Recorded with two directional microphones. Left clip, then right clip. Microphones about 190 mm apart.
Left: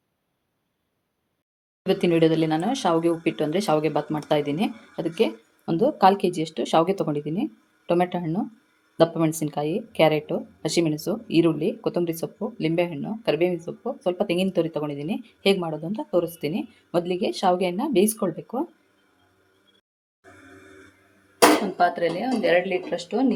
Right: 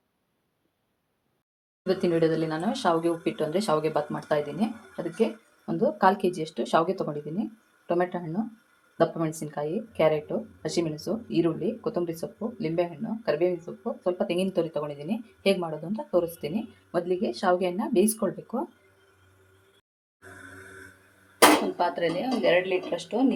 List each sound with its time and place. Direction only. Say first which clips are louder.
1.8 s speech: left 4 dB; 40° left (ahead or behind)
21.8 s speech: left 4 dB; 20° left (ahead or behind)